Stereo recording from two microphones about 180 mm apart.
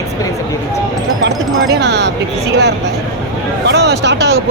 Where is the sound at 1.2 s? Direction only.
70° right (ahead or behind).